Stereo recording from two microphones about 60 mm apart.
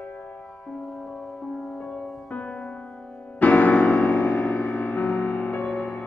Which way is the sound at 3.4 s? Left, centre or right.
Left.